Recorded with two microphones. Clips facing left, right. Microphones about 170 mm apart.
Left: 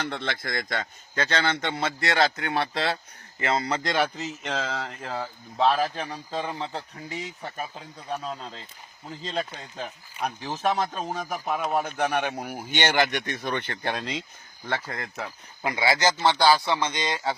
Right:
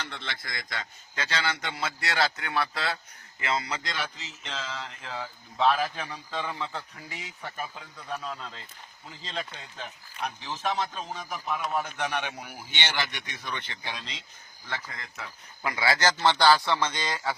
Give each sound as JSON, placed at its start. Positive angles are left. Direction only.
{"t": 0.0, "sound": "speech", "side_deg": 55}
{"t": 1.6, "sound": "speech", "side_deg": 30}
{"t": 3.7, "sound": "speech", "side_deg": 50}
{"t": 15.6, "sound": "a man's voice", "side_deg": 20}